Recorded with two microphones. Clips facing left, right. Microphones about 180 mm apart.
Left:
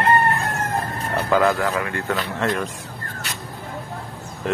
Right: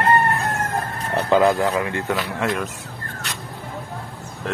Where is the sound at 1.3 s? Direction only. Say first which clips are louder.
Right 2 dB; 25° right (ahead or behind).